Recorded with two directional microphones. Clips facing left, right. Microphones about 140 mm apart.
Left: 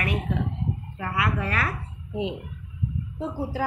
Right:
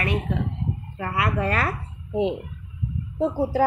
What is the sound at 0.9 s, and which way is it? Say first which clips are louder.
Speech: right 3 dB; 40° right (ahead or behind).